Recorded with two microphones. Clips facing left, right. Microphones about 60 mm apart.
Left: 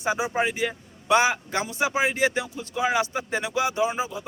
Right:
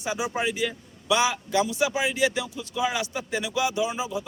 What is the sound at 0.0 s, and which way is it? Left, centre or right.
A man's voice, left.